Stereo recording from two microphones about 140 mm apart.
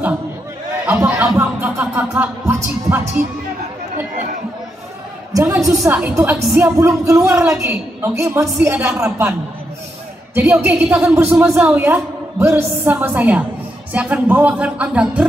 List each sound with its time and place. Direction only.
0.8 s a sound: 20° right (ahead or behind)
1.2 s music: 10° right (ahead or behind)
5.3 s a sound: 20° right (ahead or behind)
5.6 s a woman's voice: centre (ahead or behind); by 8.5 s 20° right (ahead or behind)
8.6 s a woman's voice: 10° right (ahead or behind)
10.3 s a woman's voice: 10° right (ahead or behind)